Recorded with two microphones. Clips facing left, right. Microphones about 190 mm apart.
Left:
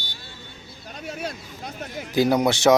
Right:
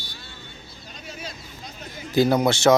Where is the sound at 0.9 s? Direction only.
65° left (ahead or behind).